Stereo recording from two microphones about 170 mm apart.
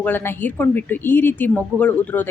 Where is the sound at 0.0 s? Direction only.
10° left (ahead or behind).